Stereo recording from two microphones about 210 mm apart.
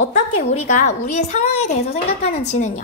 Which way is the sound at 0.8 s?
35° left (ahead or behind).